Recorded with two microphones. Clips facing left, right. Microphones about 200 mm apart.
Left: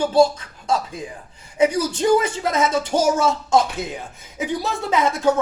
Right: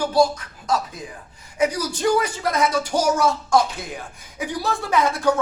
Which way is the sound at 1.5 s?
25° left (ahead or behind).